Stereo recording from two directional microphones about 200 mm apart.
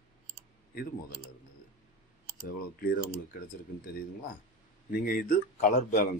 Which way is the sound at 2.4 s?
45° left (ahead or behind).